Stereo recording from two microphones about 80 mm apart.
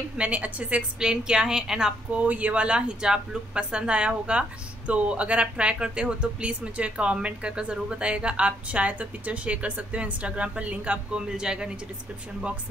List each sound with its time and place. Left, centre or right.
0.2 s a woman's voice: centre
2.2 s a woman's voice: centre